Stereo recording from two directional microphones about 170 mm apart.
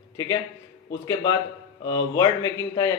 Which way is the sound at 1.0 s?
20° left (ahead or behind).